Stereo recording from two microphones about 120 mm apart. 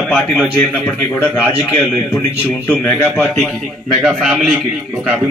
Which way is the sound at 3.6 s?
Centre (ahead or behind).